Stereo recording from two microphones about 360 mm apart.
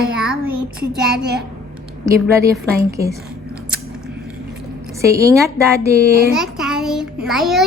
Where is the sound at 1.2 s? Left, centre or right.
Right.